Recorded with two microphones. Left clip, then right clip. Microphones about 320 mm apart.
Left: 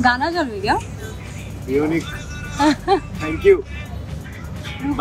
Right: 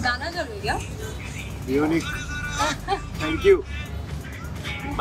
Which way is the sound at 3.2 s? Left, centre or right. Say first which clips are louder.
Left 2 dB; centre.